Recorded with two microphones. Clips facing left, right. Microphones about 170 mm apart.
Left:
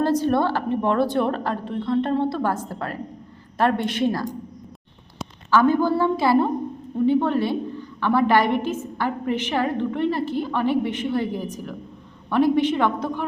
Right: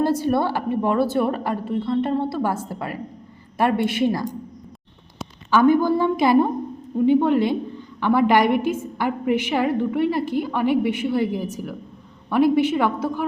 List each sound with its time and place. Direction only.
0.0 s a woman's voice: 10° right (ahead or behind)
5.5 s a woman's voice: 15° right (ahead or behind)